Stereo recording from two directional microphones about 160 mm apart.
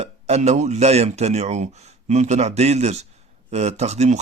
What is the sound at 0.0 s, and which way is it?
A man's voice, 45° right (ahead or behind).